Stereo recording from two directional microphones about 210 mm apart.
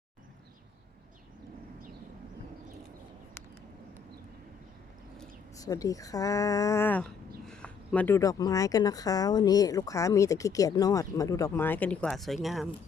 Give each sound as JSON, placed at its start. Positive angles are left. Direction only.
{"t": 5.5, "sound": "speech", "side_deg": 15}